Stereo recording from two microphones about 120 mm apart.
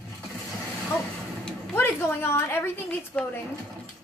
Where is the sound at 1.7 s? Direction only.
20° left (ahead or behind).